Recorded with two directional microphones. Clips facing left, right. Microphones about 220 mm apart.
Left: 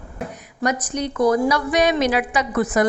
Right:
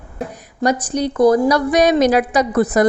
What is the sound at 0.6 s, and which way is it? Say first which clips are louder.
A woman's voice: right 5 dB; 30° right (ahead or behind).